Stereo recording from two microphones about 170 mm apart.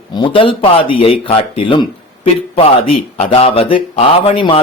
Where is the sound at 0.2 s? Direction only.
30° left (ahead or behind).